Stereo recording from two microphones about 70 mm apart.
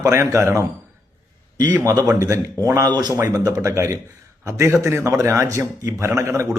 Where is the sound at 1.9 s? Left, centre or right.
Right.